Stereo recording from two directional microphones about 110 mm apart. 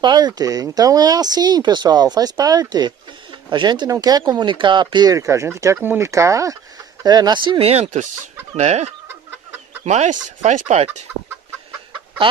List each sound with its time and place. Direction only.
0.0 s speech: 40° right (ahead or behind)
5.1 s speech: 25° right (ahead or behind); by 8.1 s 80° right
8.5 s chicken: 80° right
9.8 s speech: 90° right